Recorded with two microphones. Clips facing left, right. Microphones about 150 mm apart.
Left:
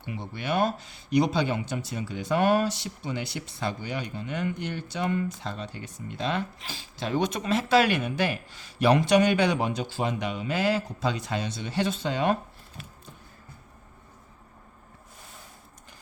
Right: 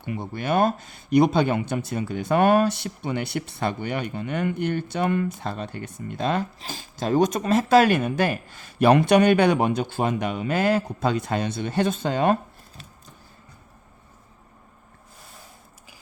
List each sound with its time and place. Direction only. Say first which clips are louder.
0.0 s speech: right 5 dB; 50° right (ahead or behind)